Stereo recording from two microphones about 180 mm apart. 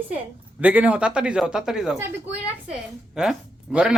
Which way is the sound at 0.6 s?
5° right (ahead or behind).